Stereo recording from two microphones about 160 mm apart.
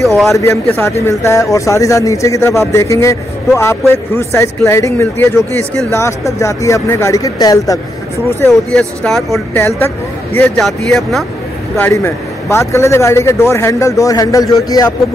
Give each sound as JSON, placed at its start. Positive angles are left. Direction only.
{"t": 0.0, "sound": "speech", "side_deg": 0}
{"t": 0.4, "sound": "a man's voice", "side_deg": 15}
{"t": 8.4, "sound": "speech", "side_deg": 5}
{"t": 9.5, "sound": "speech", "side_deg": 15}
{"t": 10.6, "sound": "speech", "side_deg": 0}
{"t": 11.7, "sound": "a man's voice", "side_deg": 15}